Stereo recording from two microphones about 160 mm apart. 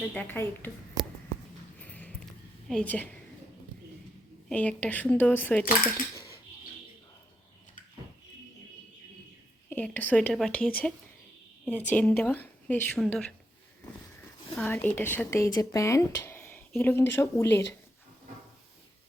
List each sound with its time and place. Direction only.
0.1 s speech: 10° left (ahead or behind)
1.8 s a sound: 10° left (ahead or behind)
2.6 s speech: 5° left (ahead or behind)
4.4 s speech: 10° left (ahead or behind)
9.6 s speech: 10° left (ahead or behind)
14.7 s speech: 10° left (ahead or behind)